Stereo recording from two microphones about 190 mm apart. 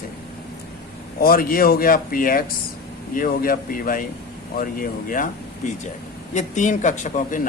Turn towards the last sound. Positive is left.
turn(degrees=40)  # may be behind; listen again after turning